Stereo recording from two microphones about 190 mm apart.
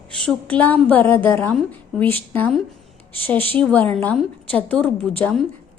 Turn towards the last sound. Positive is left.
turn(degrees=5)  # may be behind; listen again after turning